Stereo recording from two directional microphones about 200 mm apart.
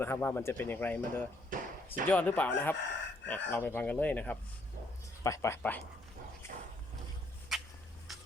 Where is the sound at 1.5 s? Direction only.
40° right (ahead or behind).